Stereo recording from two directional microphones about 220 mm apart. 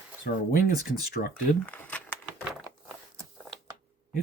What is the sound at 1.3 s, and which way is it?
Speech, 10° left (ahead or behind).